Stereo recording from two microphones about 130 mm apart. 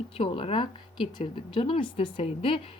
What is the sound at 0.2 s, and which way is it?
Speech, 45° left (ahead or behind).